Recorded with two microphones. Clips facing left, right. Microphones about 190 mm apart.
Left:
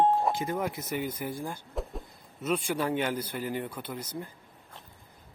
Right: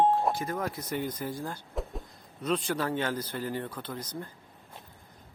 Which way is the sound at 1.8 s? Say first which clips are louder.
Even; centre (ahead or behind).